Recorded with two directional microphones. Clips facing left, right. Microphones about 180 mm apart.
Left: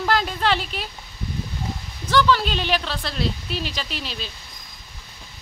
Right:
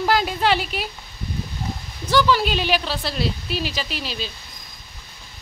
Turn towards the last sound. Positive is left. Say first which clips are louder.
# right 3 dB
turn(degrees=0)  # may be behind; listen again after turning